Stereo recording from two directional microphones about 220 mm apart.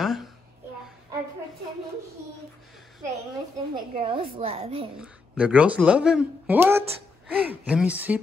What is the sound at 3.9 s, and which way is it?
Speech, 25° right (ahead or behind).